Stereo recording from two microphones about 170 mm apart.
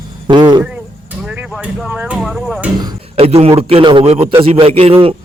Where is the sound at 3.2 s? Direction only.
35° right (ahead or behind).